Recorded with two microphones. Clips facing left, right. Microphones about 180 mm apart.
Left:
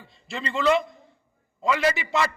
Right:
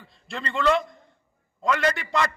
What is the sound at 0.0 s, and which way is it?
A man's voice, centre (ahead or behind).